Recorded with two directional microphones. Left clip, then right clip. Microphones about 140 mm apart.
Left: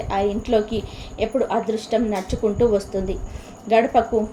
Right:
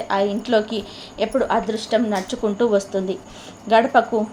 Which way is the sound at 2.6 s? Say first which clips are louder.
Right 1 dB; 35° right (ahead or behind).